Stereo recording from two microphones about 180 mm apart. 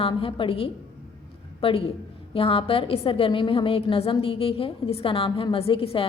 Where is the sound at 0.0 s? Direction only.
30° left (ahead or behind).